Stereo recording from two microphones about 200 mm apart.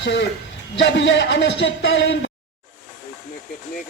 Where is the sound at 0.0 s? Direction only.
60° left (ahead or behind).